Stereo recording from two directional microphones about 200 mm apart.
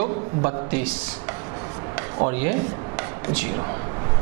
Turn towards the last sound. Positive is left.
turn(degrees=-20)  # may be behind; listen again after turning